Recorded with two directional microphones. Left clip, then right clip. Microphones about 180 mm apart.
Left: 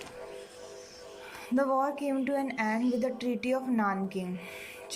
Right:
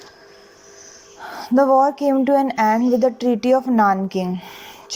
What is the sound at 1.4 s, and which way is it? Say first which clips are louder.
Speech: right 14 dB; 40° right (ahead or behind).